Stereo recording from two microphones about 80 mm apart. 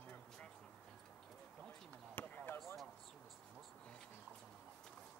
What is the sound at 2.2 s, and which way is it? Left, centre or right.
Basketball bounce, left.